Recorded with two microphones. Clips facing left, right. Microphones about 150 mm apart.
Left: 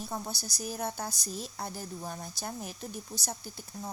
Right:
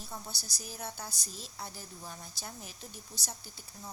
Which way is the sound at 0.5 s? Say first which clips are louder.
Left 8 dB; 45° left (ahead or behind).